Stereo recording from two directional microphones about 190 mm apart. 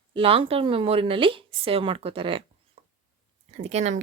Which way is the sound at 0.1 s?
30° right (ahead or behind).